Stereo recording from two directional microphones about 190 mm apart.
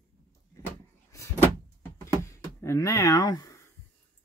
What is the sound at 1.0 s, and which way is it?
Door, 15° left (ahead or behind).